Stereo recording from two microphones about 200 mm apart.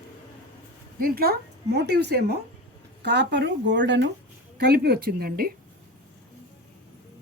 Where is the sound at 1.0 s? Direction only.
50° right (ahead or behind).